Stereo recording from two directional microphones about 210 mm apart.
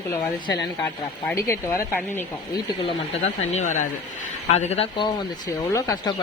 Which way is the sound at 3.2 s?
35° left (ahead or behind).